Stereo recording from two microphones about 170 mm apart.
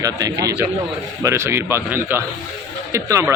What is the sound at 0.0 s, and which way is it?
Speech, 20° right (ahead or behind).